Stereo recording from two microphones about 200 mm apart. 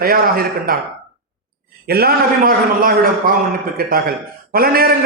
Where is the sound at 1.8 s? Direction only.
50° right (ahead or behind).